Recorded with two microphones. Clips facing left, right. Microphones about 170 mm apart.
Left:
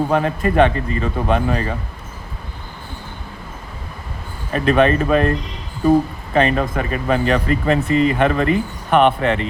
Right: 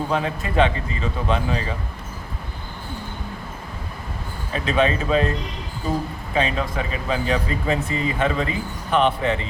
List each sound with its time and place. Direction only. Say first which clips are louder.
0.1 s speech: left 6 dB; 55° left (ahead or behind)
4.5 s speech: left 6 dB; 55° left (ahead or behind)
6.3 s speech: left 6 dB; 55° left (ahead or behind)